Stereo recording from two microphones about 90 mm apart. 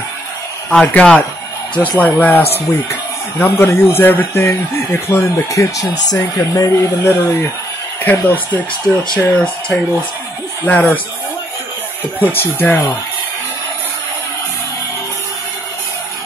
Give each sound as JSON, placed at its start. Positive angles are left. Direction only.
{"t": 0.7, "sound": "speech", "side_deg": 10}
{"t": 8.0, "sound": "speech", "side_deg": 20}
{"t": 12.4, "sound": "speech", "side_deg": 20}